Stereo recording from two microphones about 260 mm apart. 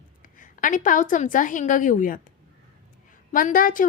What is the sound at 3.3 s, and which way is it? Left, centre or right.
Speech, left.